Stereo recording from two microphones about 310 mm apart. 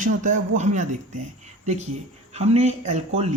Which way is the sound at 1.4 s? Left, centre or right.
Right.